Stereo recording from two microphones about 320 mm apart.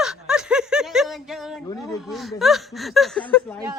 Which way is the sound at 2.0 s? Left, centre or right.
Centre.